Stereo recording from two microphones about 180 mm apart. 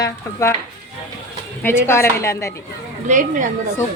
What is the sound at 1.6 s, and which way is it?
Speech, 15° left (ahead or behind).